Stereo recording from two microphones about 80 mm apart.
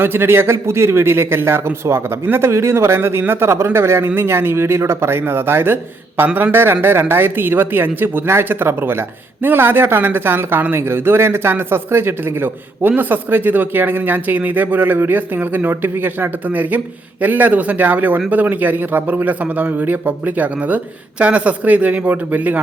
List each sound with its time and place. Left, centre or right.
0.0 s a man's voice: right